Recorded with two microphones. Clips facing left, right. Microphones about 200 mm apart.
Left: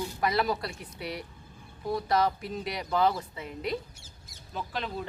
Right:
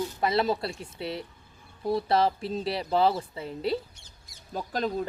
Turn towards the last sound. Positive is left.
turn(degrees=-40)  # may be behind; listen again after turning